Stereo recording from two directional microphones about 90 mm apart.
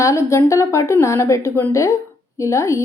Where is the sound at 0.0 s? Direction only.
35° left (ahead or behind).